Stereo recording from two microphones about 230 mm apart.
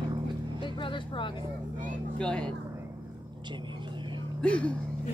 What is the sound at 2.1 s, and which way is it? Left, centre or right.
Speech, centre.